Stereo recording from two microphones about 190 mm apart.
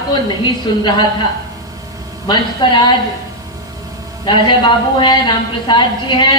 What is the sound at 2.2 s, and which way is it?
Speech, 25° left (ahead or behind).